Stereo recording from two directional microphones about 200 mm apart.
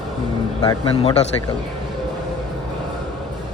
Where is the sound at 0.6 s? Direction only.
25° left (ahead or behind).